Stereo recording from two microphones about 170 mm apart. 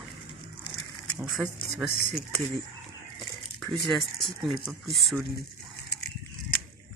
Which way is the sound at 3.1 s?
Centre (ahead or behind).